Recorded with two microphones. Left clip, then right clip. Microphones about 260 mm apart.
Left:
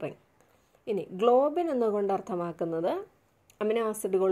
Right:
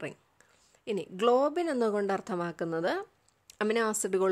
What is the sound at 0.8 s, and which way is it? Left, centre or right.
A woman's voice, right.